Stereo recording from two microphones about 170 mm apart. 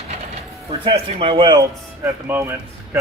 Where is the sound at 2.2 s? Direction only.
15° right (ahead or behind).